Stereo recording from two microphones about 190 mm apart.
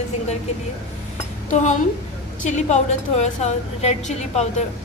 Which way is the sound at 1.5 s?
40° left (ahead or behind).